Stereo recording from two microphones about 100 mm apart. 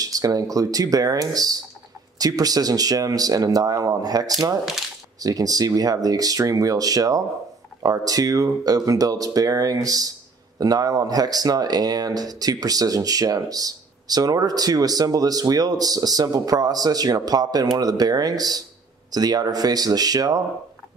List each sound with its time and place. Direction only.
0.0 s speech: 35° right (ahead or behind)